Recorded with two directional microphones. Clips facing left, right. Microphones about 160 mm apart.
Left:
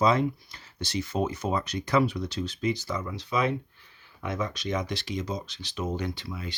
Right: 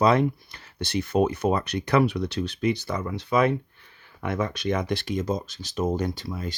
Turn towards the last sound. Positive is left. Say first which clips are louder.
# right 4 dB
turn(degrees=-45)  # may be behind; listen again after turning